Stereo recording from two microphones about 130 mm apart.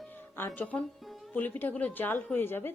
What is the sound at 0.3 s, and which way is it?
Speech, 15° left (ahead or behind).